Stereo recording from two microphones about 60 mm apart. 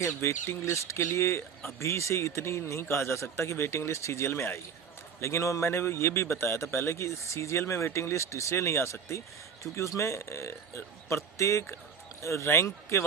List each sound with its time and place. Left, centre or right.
0.2 s a man's voice: left